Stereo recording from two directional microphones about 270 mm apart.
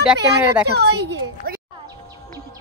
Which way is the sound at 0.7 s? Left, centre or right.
Right.